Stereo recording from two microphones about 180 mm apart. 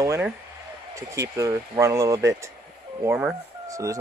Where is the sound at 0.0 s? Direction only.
15° right (ahead or behind).